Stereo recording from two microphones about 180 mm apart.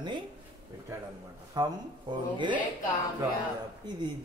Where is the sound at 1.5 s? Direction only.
25° right (ahead or behind).